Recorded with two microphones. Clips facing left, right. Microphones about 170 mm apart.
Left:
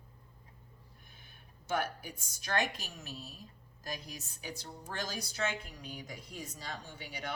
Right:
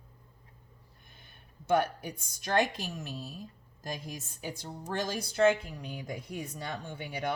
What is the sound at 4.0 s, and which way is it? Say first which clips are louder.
A woman's voice: right 6 dB; 50° right (ahead or behind).